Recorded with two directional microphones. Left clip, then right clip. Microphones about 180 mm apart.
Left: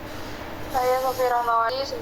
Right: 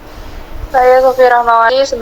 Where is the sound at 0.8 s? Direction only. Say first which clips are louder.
Right 15 dB; 50° right (ahead or behind).